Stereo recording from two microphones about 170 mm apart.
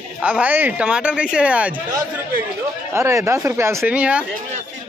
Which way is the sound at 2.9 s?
15° right (ahead or behind).